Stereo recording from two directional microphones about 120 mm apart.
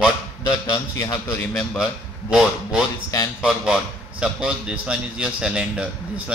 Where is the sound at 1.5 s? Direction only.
5° right (ahead or behind).